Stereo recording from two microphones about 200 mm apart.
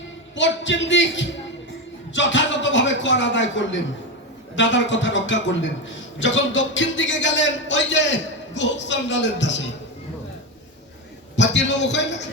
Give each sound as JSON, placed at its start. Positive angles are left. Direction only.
{"t": 0.3, "sound": "speech", "side_deg": 65}
{"t": 11.3, "sound": "speech", "side_deg": 65}